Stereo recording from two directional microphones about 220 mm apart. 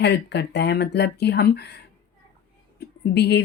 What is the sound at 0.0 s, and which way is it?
Speech, 50° left (ahead or behind).